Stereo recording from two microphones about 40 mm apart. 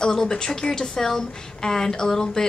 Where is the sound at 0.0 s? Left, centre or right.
Centre.